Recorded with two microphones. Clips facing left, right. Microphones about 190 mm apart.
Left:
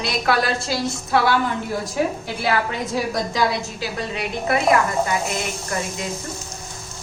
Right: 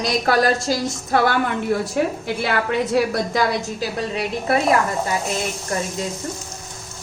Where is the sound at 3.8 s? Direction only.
35° right (ahead or behind).